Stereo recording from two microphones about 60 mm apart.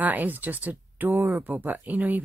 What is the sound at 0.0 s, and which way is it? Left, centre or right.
Speech, right.